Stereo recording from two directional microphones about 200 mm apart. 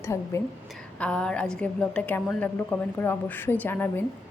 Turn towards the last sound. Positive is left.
turn(degrees=10)  # may be behind; listen again after turning